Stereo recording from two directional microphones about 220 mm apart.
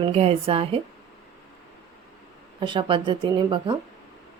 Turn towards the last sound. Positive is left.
turn(degrees=-20)  # may be behind; listen again after turning